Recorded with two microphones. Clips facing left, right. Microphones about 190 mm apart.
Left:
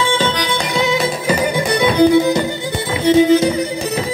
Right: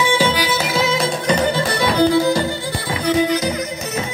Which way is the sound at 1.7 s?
20° left (ahead or behind).